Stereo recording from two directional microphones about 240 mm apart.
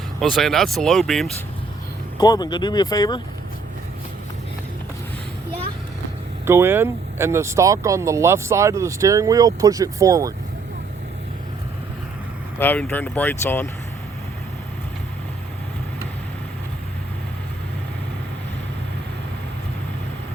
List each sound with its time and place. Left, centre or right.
0.2 s speech: centre
2.1 s speech: centre
6.4 s speech: centre
12.5 s speech: centre